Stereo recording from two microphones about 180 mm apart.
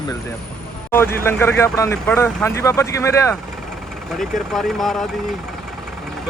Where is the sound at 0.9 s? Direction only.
15° left (ahead or behind).